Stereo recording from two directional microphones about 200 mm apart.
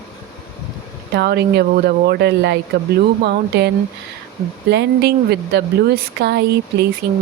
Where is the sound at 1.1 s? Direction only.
55° right (ahead or behind).